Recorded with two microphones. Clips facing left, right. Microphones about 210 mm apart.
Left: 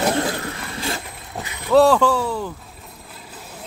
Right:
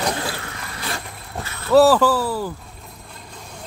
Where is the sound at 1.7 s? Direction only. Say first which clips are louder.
Right 1 dB; 5° right (ahead or behind).